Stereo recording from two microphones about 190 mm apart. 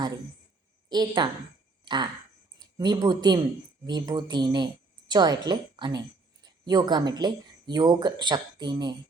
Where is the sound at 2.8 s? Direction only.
25° right (ahead or behind).